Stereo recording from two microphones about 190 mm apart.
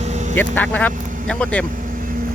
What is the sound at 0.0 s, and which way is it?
Vehicle, 35° right (ahead or behind).